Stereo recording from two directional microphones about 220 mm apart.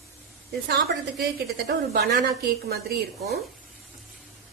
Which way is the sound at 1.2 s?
45° right (ahead or behind).